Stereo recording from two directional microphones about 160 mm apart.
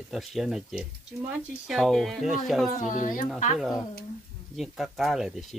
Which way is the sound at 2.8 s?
55° left (ahead or behind).